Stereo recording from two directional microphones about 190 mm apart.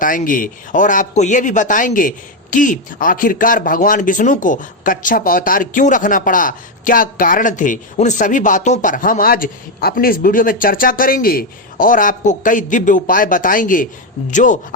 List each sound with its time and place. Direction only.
0.0 s a man's voice: 45° left (ahead or behind)